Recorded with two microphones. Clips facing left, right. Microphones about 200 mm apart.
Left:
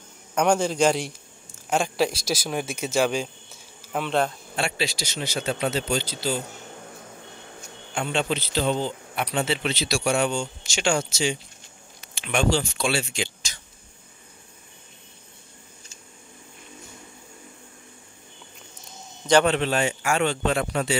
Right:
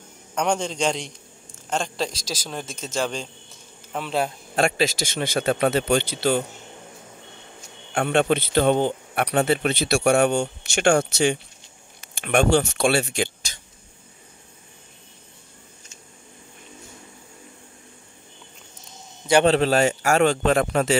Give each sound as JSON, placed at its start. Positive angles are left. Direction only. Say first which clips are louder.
{"t": 0.3, "sound": "a man's voice", "louder": "left 3 dB", "side_deg": 5}
{"t": 3.9, "sound": "speech", "louder": "left 1 dB", "side_deg": -5}
{"t": 4.6, "sound": "a man's voice", "louder": "right 6 dB", "side_deg": -45}
{"t": 7.9, "sound": "a man's voice", "louder": "right 6 dB", "side_deg": -55}
{"t": 19.4, "sound": "a man's voice", "louder": "right 5 dB", "side_deg": -35}